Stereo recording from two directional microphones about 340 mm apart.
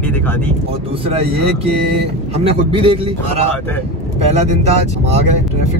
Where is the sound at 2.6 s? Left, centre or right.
Centre.